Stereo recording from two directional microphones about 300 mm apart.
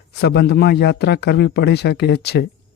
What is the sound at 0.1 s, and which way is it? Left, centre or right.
A man's voice, left.